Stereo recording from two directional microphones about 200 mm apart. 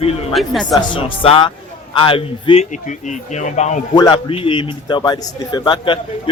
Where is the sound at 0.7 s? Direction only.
25° left (ahead or behind).